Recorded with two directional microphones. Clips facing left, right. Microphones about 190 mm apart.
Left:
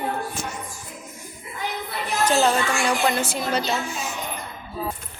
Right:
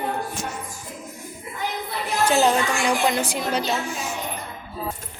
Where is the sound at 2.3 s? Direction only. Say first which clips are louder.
Right 1 dB; 15° right (ahead or behind).